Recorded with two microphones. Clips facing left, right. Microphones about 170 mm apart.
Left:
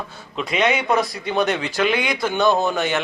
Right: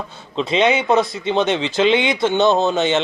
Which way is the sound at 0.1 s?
25° right (ahead or behind).